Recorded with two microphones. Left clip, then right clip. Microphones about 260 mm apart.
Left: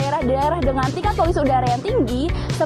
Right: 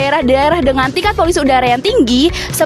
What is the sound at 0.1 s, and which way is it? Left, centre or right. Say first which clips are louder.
A woman's voice: right 6 dB; right.